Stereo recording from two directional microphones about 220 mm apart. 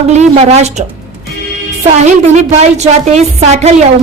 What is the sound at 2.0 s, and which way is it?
A woman's voice, 30° right (ahead or behind).